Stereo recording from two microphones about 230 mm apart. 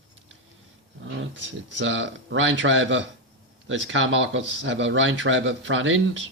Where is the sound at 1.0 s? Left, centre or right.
Right.